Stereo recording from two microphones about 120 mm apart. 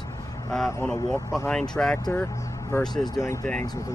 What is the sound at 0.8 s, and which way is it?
Speech, 5° left (ahead or behind).